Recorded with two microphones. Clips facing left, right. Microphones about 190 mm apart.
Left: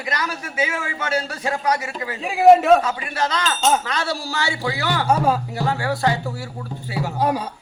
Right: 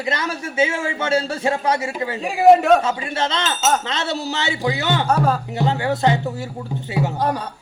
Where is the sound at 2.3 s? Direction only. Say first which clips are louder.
Even; centre (ahead or behind).